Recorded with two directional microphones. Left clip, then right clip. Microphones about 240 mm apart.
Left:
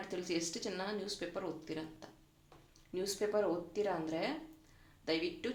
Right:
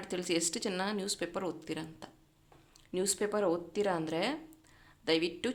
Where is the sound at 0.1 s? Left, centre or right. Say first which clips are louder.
Right 6 dB; right.